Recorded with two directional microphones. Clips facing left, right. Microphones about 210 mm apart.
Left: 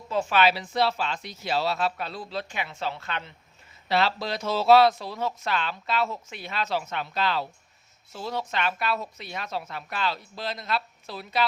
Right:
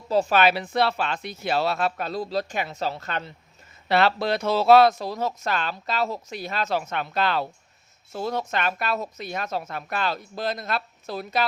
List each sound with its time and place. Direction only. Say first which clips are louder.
0.1 s speech: right 3 dB; 40° right (ahead or behind)
3.8 s speech: right 4 dB; 60° right (ahead or behind)